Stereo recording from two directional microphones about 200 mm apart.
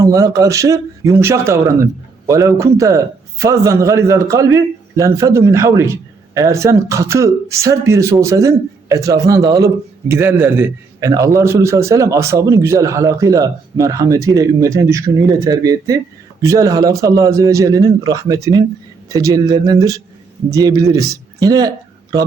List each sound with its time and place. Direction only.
0.0 s a man's voice: 15° right (ahead or behind)